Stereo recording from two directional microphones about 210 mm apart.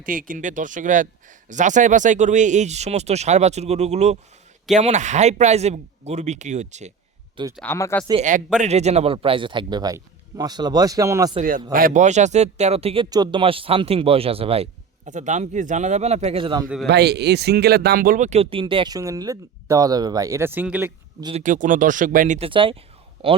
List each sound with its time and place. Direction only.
0.0 s speech: 40° right (ahead or behind)
7.5 s speech: 10° left (ahead or behind)
8.5 s speech: 30° right (ahead or behind); by 11.3 s 15° right (ahead or behind)
11.7 s speech: 40° right (ahead or behind); by 16.6 s 25° right (ahead or behind)
16.8 s speech: 50° right (ahead or behind); by 20.9 s 10° right (ahead or behind)
21.2 s speech: 20° right (ahead or behind)
21.4 s speech: 35° right (ahead or behind)
22.4 s speech: 25° right (ahead or behind)